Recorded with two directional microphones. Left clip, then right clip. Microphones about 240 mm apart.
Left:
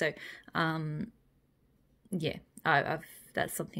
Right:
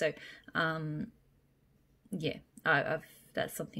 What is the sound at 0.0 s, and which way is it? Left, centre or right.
Speech, left.